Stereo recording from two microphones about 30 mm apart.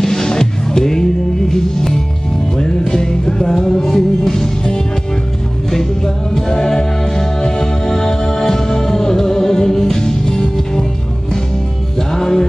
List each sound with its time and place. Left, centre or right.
0.0 s music: centre
6.3 s music: centre
12.1 s music: centre